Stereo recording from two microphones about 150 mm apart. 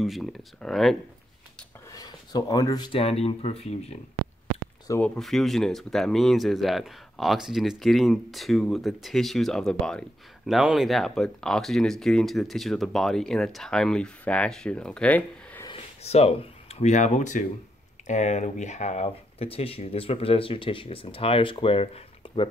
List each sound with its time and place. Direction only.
0.0 s speech: centre (ahead or behind)
1.9 s speech: 25° left (ahead or behind); by 4.0 s 45° left (ahead or behind)
5.0 s speech: 5° left (ahead or behind)
16.0 s speech: 45° left (ahead or behind)